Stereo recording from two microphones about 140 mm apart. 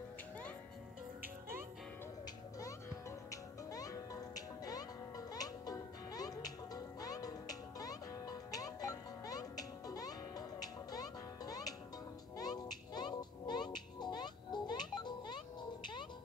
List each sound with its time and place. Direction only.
3.3 s music: 25° left (ahead or behind)